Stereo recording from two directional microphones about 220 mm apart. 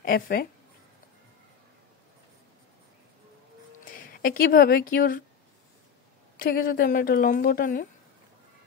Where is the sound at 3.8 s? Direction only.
40° left (ahead or behind).